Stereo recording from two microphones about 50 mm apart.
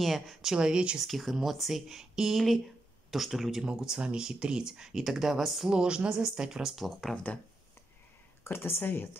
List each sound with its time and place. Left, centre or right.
0.0 s speech: centre
0.5 s speech: centre
0.9 s speech: centre
3.7 s speech: centre
5.7 s speech: centre
7.3 s speech: left
8.5 s speech: left